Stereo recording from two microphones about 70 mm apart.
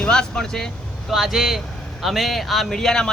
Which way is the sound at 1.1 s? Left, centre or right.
Centre.